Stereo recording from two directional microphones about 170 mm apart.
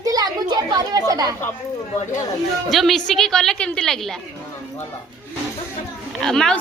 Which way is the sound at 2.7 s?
Centre (ahead or behind).